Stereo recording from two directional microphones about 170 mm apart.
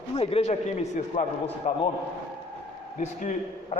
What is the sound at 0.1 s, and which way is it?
A man's voice, 35° left (ahead or behind).